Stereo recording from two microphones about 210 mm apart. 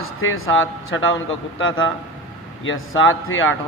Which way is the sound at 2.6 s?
70° left (ahead or behind).